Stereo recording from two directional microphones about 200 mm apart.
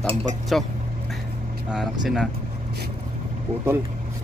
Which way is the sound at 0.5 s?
Centre (ahead or behind).